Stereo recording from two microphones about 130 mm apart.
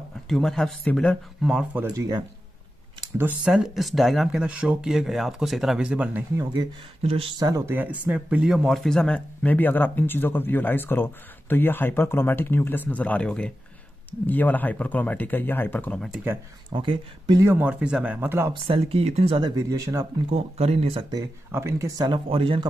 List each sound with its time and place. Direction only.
0.3 s speech: 5° left (ahead or behind)
2.0 s speech: 30° right (ahead or behind)
3.2 s speech: 10° right (ahead or behind)
6.3 s speech: 25° right (ahead or behind)
7.0 s speech: 50° right (ahead or behind)
7.3 s speech: 25° right (ahead or behind); by 16.0 s 15° left (ahead or behind)
16.7 s speech: 40° right (ahead or behind)
17.4 s speech: 15° right (ahead or behind)
18.5 s speech: 45° right (ahead or behind)
19.5 s speech: 25° right (ahead or behind)
20.2 s speech: 50° right (ahead or behind)
21.5 s speech: 20° right (ahead or behind); by 22.7 s 45° right (ahead or behind)